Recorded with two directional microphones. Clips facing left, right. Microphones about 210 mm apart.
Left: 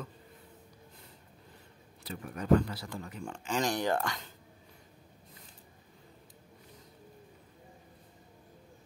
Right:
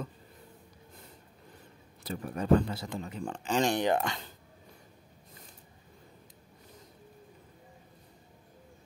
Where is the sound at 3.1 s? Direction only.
35° right (ahead or behind).